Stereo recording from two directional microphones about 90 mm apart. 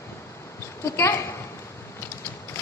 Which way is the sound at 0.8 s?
30° left (ahead or behind).